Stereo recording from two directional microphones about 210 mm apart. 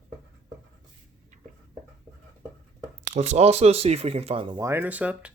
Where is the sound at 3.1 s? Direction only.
30° right (ahead or behind).